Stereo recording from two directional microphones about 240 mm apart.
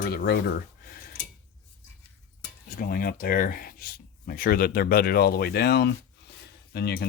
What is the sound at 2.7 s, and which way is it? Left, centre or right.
Speech, left.